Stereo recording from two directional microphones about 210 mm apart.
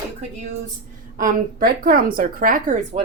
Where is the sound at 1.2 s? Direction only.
40° right (ahead or behind).